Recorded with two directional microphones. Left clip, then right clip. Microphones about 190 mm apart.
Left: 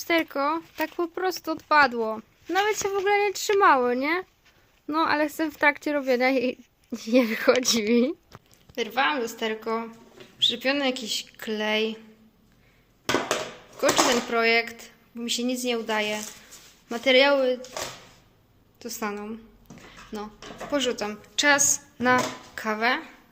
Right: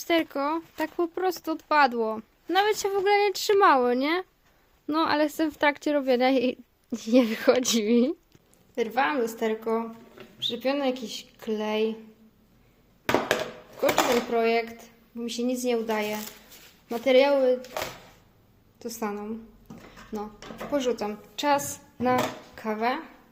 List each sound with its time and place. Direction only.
0.0 s speech: centre (ahead or behind)
8.7 s speech: 20° right (ahead or behind); by 11.9 s centre (ahead or behind)
13.8 s speech: centre (ahead or behind)
18.8 s a woman's voice: 10° right (ahead or behind)